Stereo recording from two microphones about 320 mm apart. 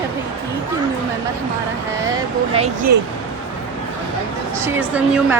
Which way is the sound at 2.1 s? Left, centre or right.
Centre.